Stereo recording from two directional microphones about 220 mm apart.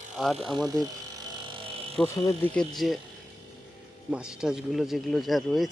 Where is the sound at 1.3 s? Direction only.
20° right (ahead or behind).